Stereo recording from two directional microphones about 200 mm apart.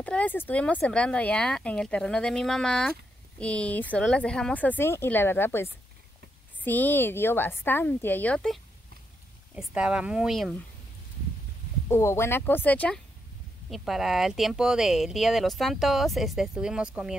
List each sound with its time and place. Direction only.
0.0 s speech: 5° left (ahead or behind)
9.6 s speech: 5° right (ahead or behind)
11.9 s speech: 15° left (ahead or behind); by 17.1 s 5° right (ahead or behind)